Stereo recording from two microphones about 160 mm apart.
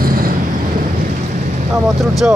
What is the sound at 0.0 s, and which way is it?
Vehicle, 65° right (ahead or behind).